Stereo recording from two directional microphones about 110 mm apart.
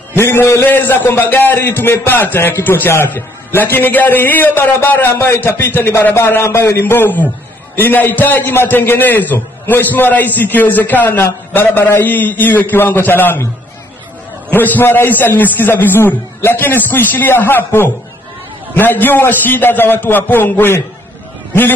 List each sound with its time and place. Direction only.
0.1 s a man's voice: 20° left (ahead or behind)
14.5 s a man's voice: 15° left (ahead or behind)